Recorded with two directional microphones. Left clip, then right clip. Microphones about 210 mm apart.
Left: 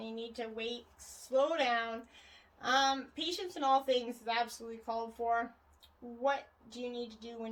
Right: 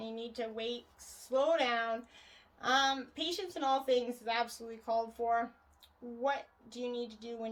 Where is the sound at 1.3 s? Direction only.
30° right (ahead or behind).